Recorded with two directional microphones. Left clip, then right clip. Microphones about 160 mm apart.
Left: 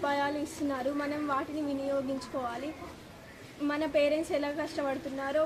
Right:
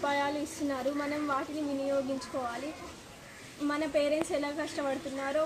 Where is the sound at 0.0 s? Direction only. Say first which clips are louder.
Even; 10° right (ahead or behind).